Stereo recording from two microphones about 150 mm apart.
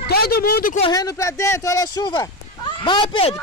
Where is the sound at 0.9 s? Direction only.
20° left (ahead or behind).